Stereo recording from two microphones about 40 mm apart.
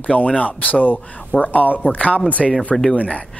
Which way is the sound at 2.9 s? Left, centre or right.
Left.